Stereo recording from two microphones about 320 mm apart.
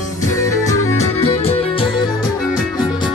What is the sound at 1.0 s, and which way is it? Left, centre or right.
Music, centre.